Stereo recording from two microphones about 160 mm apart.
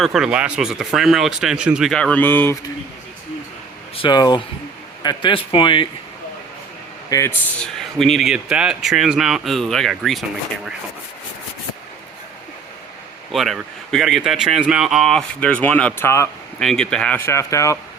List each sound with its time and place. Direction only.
0.0 s a man's voice: 5° right (ahead or behind); by 2.6 s 15° left (ahead or behind)
3.9 s speech: 30° left (ahead or behind)
7.1 s speech: 20° left (ahead or behind)
7.6 s a man's voice: 5° left (ahead or behind)
13.3 s a man's voice: centre (ahead or behind); by 16.3 s 15° left (ahead or behind)
16.6 s speech: 5° left (ahead or behind)